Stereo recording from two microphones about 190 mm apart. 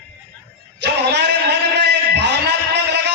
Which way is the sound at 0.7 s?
65° right (ahead or behind).